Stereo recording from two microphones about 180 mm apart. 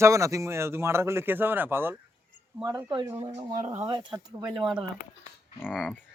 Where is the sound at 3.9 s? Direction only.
25° right (ahead or behind).